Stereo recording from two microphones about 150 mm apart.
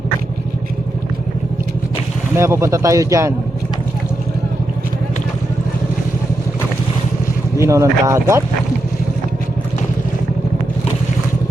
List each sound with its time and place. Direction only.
2.3 s speech: 20° right (ahead or behind)
7.6 s speech: 20° right (ahead or behind)